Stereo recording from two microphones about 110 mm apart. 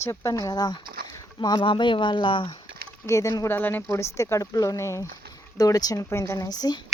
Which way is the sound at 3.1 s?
30° left (ahead or behind).